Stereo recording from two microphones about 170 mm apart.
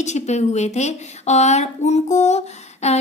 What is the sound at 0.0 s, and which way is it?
Speech, 40° left (ahead or behind).